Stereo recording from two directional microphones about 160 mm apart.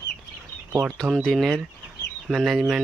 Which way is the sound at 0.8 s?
Centre (ahead or behind).